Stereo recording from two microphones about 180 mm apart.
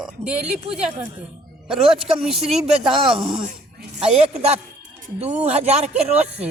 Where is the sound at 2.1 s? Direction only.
Centre (ahead or behind).